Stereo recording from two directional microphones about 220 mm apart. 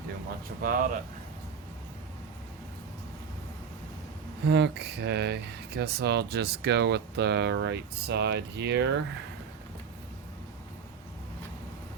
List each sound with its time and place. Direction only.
0.6 s speech: 40° right (ahead or behind)
4.4 s speech: 50° right (ahead or behind)